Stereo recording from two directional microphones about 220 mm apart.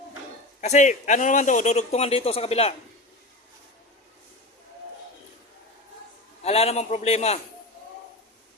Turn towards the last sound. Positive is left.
turn(degrees=30)  # may be behind; listen again after turning